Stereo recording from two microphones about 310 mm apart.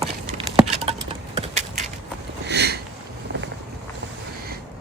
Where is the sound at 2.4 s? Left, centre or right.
Right.